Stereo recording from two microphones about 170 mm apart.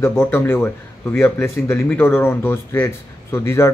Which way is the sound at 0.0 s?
15° left (ahead or behind).